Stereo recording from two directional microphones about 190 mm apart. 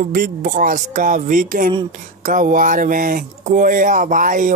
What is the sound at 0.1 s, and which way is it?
Speech, 45° right (ahead or behind).